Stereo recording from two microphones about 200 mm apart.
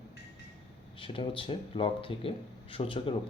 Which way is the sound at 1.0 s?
25° left (ahead or behind).